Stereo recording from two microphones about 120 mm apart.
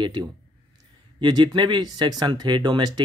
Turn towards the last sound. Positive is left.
turn(degrees=-35)  # may be behind; listen again after turning